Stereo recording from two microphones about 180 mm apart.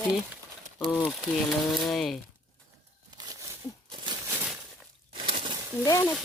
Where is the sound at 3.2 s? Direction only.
20° right (ahead or behind).